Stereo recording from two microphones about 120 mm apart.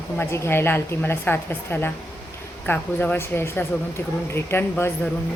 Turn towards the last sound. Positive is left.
turn(degrees=20)  # may be behind; listen again after turning